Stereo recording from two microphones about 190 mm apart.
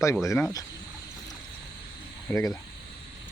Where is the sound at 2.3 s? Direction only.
20° left (ahead or behind).